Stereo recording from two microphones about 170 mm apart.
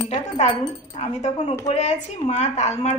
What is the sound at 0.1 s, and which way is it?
A woman's voice, 35° left (ahead or behind).